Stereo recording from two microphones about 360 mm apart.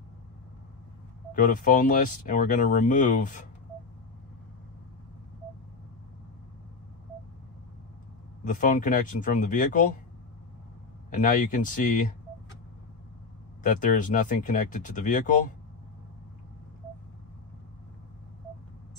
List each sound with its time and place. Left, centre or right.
1.3 s speech: left
8.5 s speech: left
11.1 s speech: left
13.6 s speech: left